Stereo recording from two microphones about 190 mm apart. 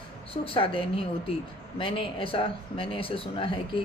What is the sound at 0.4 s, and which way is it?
Speech, 30° left (ahead or behind).